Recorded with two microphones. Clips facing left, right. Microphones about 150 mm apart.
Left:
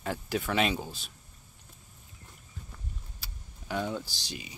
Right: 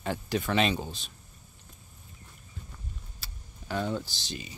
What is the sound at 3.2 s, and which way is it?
Computer keyboard, 10° left (ahead or behind).